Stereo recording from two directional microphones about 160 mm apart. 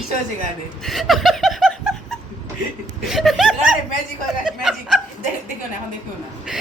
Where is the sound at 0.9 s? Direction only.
Centre (ahead or behind).